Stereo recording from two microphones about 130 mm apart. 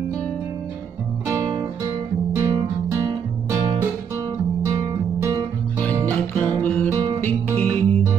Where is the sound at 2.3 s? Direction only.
20° right (ahead or behind).